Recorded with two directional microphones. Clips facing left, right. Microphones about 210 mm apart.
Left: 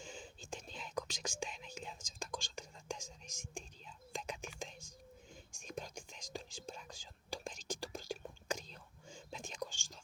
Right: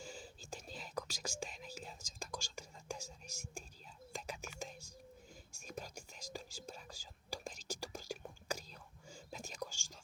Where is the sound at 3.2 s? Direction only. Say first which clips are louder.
Left 1 dB; 5° right (ahead or behind).